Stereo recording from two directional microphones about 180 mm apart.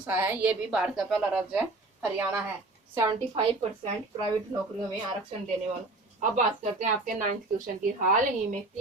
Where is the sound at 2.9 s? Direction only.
20° right (ahead or behind).